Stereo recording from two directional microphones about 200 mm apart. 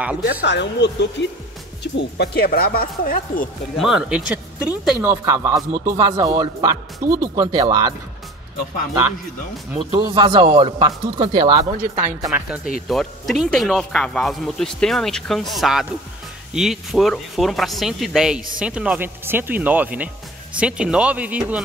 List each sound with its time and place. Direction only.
0.2 s speech: 50° left (ahead or behind)
3.7 s speech: centre (ahead or behind)
7.0 s speech: 45° right (ahead or behind)
7.3 s speech: 20° right (ahead or behind)
9.9 s speech: 20° right (ahead or behind)
12.0 s speech: 10° right (ahead or behind)